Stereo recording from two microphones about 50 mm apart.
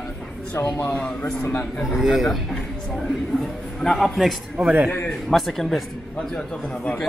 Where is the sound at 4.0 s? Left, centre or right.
Centre.